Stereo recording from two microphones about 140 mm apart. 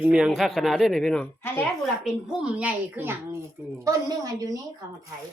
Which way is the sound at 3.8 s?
25° right (ahead or behind).